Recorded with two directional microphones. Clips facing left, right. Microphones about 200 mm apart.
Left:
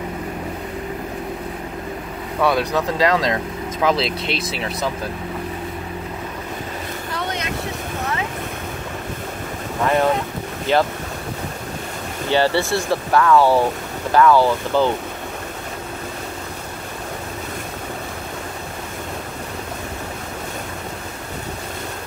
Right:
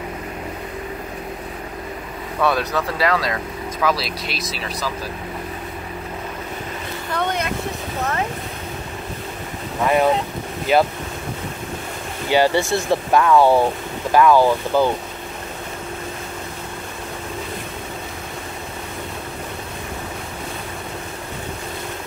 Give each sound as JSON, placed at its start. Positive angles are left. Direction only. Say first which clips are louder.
{"t": 2.4, "sound": "speech", "louder": "left 2 dB", "side_deg": 15}
{"t": 7.2, "sound": "vehicle", "louder": "right 4 dB", "side_deg": -55}
{"t": 10.7, "sound": "speech", "louder": "right 1 dB", "side_deg": -10}
{"t": 12.3, "sound": "speech", "louder": "right 1 dB", "side_deg": -15}